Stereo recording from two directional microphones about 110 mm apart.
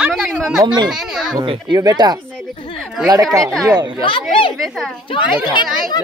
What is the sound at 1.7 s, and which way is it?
Speech, 35° right (ahead or behind).